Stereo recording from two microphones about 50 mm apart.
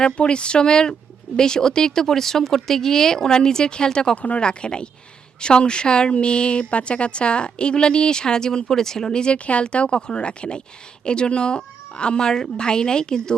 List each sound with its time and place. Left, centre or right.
0.0 s speech: left